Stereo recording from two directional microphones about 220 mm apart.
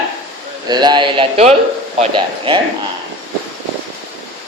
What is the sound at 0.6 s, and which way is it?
A man's voice, 20° right (ahead or behind).